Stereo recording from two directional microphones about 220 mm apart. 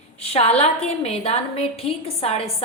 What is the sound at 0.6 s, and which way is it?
A woman's voice, 30° left (ahead or behind).